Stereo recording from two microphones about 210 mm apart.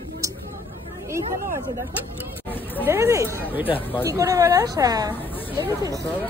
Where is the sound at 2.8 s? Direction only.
10° right (ahead or behind).